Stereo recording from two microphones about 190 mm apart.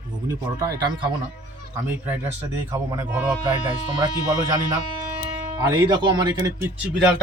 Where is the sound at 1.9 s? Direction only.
10° right (ahead or behind).